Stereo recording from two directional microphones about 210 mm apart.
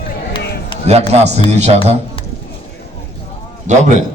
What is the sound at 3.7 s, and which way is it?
Speech, 35° right (ahead or behind).